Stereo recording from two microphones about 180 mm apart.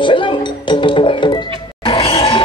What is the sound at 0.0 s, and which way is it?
Music, 25° left (ahead or behind).